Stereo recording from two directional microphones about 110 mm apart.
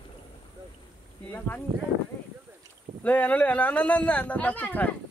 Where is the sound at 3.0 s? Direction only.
15° left (ahead or behind).